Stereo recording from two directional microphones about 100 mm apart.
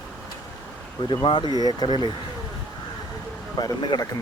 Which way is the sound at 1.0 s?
55° left (ahead or behind).